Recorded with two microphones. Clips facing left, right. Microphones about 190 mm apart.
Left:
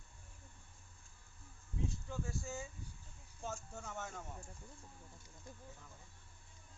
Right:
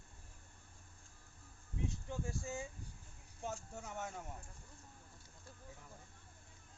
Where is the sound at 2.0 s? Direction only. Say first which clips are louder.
Right 1 dB; 15° right (ahead or behind).